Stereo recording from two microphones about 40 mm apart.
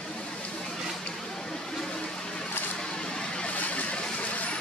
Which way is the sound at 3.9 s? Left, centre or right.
Left.